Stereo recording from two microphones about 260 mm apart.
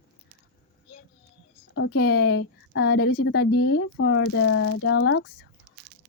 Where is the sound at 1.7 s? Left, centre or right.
Left.